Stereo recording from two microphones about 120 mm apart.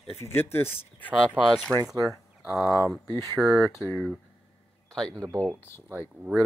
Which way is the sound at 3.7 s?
25° left (ahead or behind).